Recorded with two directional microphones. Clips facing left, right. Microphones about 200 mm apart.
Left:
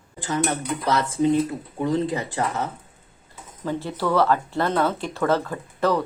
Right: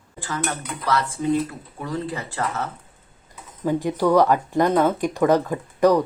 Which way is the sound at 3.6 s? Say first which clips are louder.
Right 5 dB; 15° right (ahead or behind).